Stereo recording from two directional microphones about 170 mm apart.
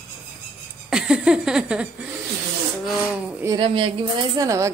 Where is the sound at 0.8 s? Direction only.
5° right (ahead or behind).